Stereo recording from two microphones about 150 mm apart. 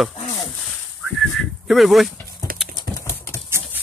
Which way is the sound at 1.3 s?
Centre (ahead or behind).